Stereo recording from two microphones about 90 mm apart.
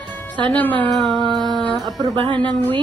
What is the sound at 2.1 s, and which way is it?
Speech, 75° right (ahead or behind).